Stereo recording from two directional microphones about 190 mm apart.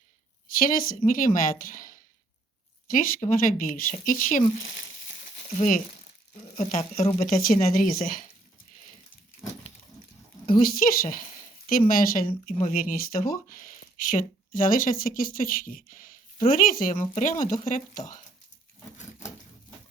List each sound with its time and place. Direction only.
0.4 s speech: 45° left (ahead or behind)
7.4 s speech: 45° left (ahead or behind)
10.6 s speech: 45° left (ahead or behind)